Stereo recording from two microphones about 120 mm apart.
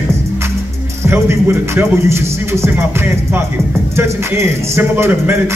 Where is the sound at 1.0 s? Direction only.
20° right (ahead or behind).